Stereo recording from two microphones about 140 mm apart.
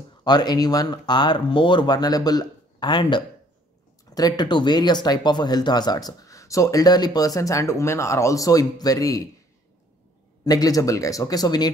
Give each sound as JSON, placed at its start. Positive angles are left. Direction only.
{"t": 0.2, "sound": "speech", "side_deg": 30}
{"t": 10.4, "sound": "speech", "side_deg": 25}